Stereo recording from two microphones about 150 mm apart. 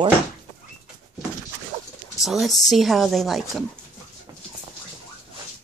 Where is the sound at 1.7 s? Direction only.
60° right (ahead or behind).